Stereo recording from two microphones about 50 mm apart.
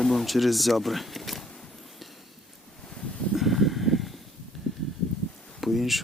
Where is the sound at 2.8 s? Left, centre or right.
Centre.